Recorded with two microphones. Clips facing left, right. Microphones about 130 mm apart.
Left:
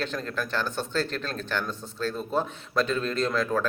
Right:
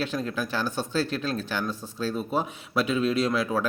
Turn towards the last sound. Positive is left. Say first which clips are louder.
# right 1 dB
turn(degrees=-10)  # may be behind; listen again after turning